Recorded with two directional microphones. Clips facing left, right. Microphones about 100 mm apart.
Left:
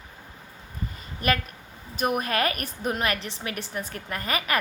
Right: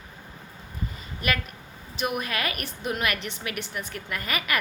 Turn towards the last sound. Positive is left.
turn(degrees=35)  # may be behind; listen again after turning